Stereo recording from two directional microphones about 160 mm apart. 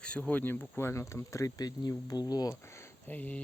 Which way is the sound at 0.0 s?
5° left (ahead or behind).